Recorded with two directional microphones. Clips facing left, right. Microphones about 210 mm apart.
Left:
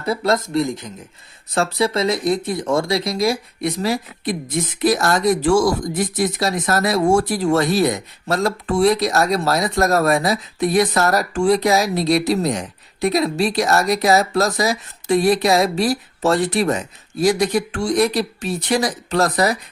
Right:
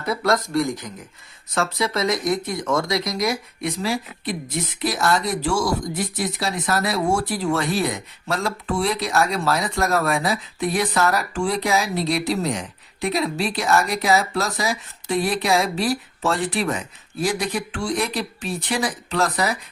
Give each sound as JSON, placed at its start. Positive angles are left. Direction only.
{"t": 0.0, "sound": "speech", "side_deg": 25}